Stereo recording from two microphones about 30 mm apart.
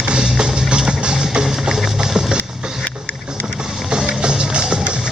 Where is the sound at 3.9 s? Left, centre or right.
Right.